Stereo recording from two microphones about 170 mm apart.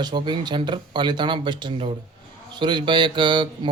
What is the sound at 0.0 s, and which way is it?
Speech, 25° right (ahead or behind).